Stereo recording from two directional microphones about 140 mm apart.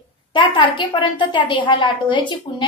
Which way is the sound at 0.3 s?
35° left (ahead or behind).